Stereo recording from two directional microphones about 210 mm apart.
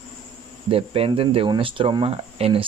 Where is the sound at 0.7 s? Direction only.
25° right (ahead or behind).